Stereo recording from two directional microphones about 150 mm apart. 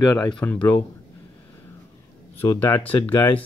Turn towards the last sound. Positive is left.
turn(degrees=15)  # may be behind; listen again after turning